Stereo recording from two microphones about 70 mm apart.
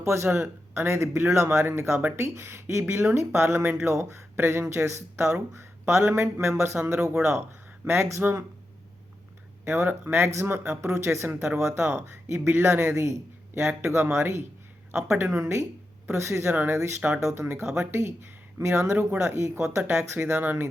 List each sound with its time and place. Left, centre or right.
0.0 s speech: right
9.6 s speech: right
15.4 s speech: right
19.2 s speech: right